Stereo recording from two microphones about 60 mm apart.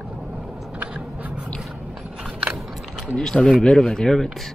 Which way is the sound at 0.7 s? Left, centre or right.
Right.